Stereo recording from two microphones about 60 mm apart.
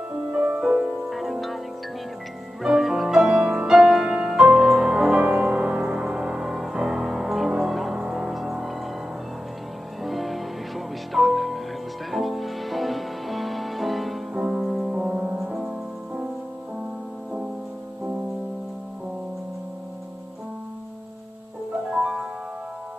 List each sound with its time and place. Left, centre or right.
0.3 s music: right
1.1 s music: centre
2.6 s music: centre
5.2 s music: right
5.7 s music: centre
10.0 s music: centre
15.0 s music: right
15.4 s music: centre
21.9 s music: centre